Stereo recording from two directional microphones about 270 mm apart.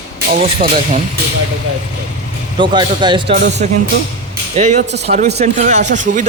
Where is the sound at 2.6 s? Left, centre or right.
Centre.